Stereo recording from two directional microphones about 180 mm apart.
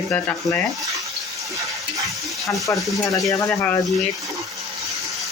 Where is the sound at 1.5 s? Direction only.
15° right (ahead or behind).